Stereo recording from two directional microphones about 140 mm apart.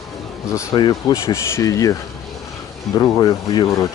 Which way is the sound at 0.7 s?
35° left (ahead or behind).